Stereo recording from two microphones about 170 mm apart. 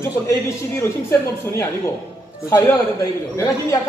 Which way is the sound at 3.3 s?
20° left (ahead or behind).